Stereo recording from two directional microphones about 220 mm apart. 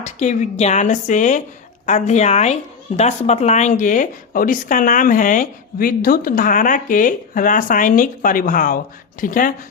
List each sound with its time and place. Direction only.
0.0 s a woman's voice: 30° left (ahead or behind)